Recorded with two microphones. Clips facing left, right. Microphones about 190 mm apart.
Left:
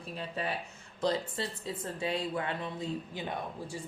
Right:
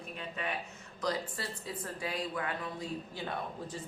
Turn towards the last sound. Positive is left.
turn(degrees=15)  # may be behind; listen again after turning